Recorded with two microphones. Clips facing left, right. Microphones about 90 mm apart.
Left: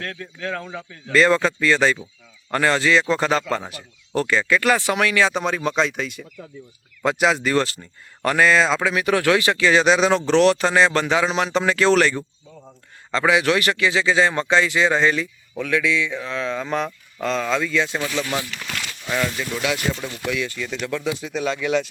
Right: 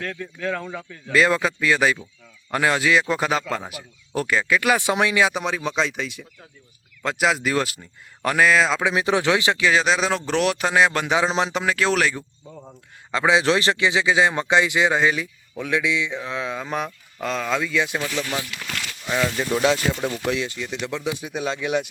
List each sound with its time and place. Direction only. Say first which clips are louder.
0.0 s a man's voice: right 2 dB; centre (ahead or behind)
4.8 s speech: even; 20° right (ahead or behind)
5.3 s a man's voice: left 3 dB; centre (ahead or behind)
8.8 s speech: left 1 dB; 20° right (ahead or behind)
9.6 s speech: left 5 dB; centre (ahead or behind)
11.2 s speech: even; 20° right (ahead or behind)
11.5 s a man's voice: left 4 dB; 5° right (ahead or behind)
13.3 s speech: right 1 dB; 25° right (ahead or behind); by 18.0 s 5° right (ahead or behind)
18.0 s speech: left 2 dB; 10° left (ahead or behind)
19.0 s speech: right 1 dB; 15° right (ahead or behind)
19.5 s speech: right 4 dB; 30° right (ahead or behind)